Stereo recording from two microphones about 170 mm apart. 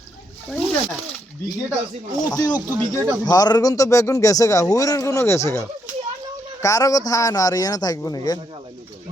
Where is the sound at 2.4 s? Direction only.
20° left (ahead or behind).